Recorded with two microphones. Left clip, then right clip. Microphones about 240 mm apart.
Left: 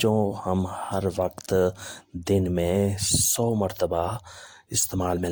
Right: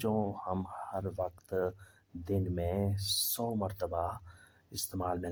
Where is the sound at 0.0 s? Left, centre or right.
Left.